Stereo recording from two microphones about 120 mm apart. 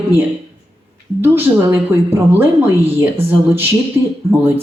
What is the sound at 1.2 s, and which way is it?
Speech, 20° right (ahead or behind).